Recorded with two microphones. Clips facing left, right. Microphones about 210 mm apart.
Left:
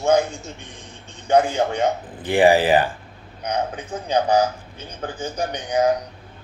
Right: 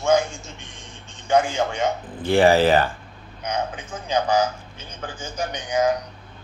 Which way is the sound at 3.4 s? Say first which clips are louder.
Left 2 dB; 35° left (ahead or behind).